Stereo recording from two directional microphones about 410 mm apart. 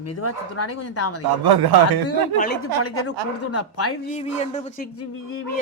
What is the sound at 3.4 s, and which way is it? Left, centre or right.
Speech, left.